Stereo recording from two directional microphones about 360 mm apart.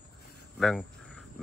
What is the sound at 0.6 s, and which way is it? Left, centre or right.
Speech, centre.